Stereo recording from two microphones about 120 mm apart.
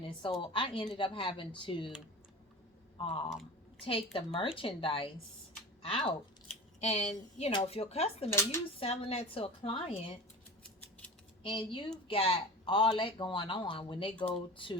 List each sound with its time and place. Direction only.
0.2 s speech: 45° left (ahead or behind)
3.0 s speech: 50° left (ahead or behind)
6.7 s speech: 65° left (ahead or behind)
8.3 s speech: 20° left (ahead or behind)
8.8 s speech: 55° left (ahead or behind)
11.4 s speech: 45° left (ahead or behind)